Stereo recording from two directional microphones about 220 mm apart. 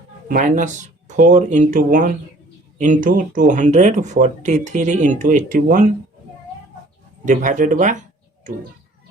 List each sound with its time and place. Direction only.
0.3 s speech: 40° right (ahead or behind)
7.3 s speech: 35° right (ahead or behind)